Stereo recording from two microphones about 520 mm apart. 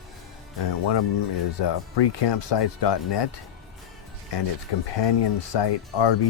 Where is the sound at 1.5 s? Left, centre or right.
Left.